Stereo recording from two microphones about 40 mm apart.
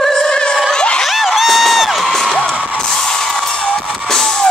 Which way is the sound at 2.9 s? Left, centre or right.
Centre.